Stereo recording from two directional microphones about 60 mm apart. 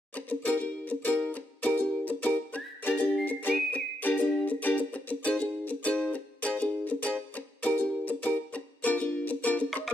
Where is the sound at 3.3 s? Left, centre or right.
Left.